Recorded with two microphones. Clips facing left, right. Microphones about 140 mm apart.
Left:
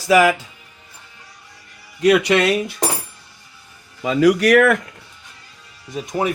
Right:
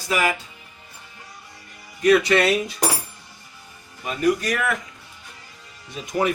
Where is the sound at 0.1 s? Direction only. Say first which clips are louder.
Left 9 dB; 90° left.